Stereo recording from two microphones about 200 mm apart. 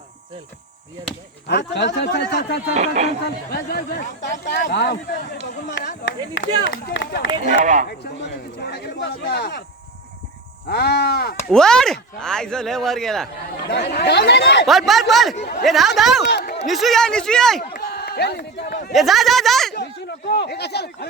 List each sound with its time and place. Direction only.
1.5 s speech: 60° left (ahead or behind)
2.7 s speech: 35° right (ahead or behind)
3.5 s speech: 50° left (ahead or behind)
7.4 s speech: 40° right (ahead or behind)
7.9 s speech: 55° left (ahead or behind)
10.7 s speech: 55° left (ahead or behind)
11.4 s speech: 5° left (ahead or behind)
13.7 s speech: 55° left (ahead or behind)
14.7 s speech: centre (ahead or behind)
16.2 s a sound: 55° left (ahead or behind)
16.6 s speech: centre (ahead or behind)
17.7 s run: 50° left (ahead or behind)
18.9 s speech: centre (ahead or behind)
19.7 s speech: 55° left (ahead or behind)